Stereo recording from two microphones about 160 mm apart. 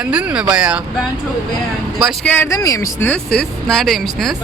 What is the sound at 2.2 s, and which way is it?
Speech, 10° left (ahead or behind).